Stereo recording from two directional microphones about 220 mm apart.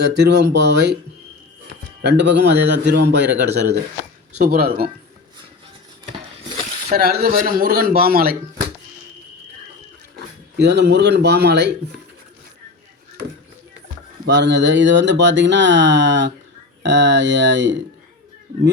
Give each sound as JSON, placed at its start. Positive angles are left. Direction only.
{"t": 0.0, "sound": "speech", "side_deg": -50}
{"t": 2.0, "sound": "speech", "side_deg": -50}
{"t": 6.9, "sound": "speech", "side_deg": -45}
{"t": 10.6, "sound": "speech", "side_deg": -50}
{"t": 14.3, "sound": "speech", "side_deg": -55}